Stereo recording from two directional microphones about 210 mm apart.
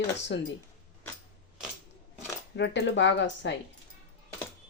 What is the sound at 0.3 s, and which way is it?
Speech, 60° left (ahead or behind).